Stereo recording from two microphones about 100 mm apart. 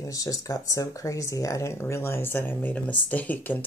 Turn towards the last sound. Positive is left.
turn(degrees=15)  # may be behind; listen again after turning